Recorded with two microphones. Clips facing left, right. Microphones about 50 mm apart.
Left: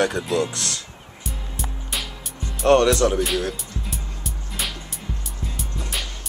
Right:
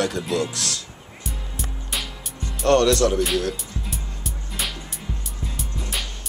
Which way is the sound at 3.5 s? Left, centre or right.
Centre.